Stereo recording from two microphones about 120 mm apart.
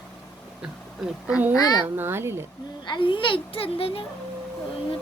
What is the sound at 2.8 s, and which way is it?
A child's voice, 40° left (ahead or behind).